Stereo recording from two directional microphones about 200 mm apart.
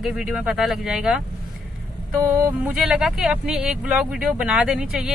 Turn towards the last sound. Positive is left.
turn(degrees=-5)  # may be behind; listen again after turning